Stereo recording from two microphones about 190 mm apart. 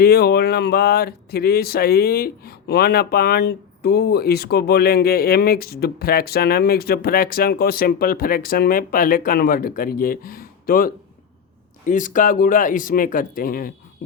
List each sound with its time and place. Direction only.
0.0 s speech: 55° left (ahead or behind)